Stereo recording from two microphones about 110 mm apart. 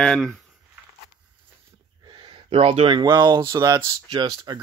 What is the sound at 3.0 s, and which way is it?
Speech, 40° right (ahead or behind).